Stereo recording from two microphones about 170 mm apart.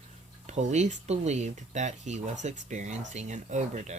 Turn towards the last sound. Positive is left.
turn(degrees=-45)  # may be behind; listen again after turning